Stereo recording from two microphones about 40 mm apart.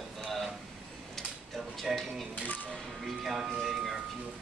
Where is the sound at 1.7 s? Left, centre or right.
Centre.